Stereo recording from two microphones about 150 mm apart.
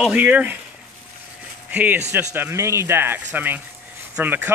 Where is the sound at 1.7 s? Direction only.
10° right (ahead or behind).